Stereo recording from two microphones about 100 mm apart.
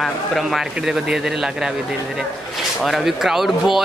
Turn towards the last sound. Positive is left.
turn(degrees=-5)  # may be behind; listen again after turning